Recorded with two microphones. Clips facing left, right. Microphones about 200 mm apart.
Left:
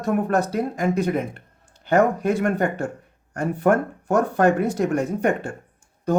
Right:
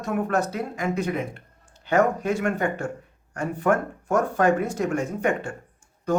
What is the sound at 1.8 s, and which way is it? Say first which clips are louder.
Speech: left 3 dB; 55° left (ahead or behind).